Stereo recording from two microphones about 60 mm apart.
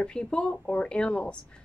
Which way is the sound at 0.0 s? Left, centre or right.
Centre.